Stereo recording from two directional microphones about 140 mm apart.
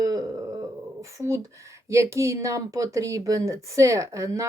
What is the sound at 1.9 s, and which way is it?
A woman's voice, 20° right (ahead or behind).